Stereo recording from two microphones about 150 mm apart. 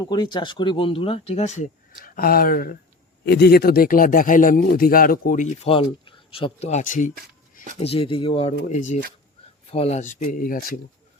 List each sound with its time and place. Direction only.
0.0 s speech: 30° left (ahead or behind); by 1.6 s 50° left (ahead or behind)
2.0 s speech: 75° left (ahead or behind)
3.2 s speech: 90° left; by 5.5 s 60° left (ahead or behind)
5.6 s speech: 40° left (ahead or behind); by 7.1 s 60° left (ahead or behind)
7.8 s speech: 40° left (ahead or behind)
8.6 s speech: 55° left (ahead or behind)